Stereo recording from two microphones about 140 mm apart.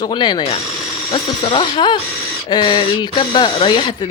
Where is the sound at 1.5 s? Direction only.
35° left (ahead or behind).